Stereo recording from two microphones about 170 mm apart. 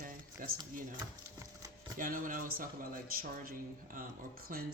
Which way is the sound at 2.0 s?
55° right (ahead or behind).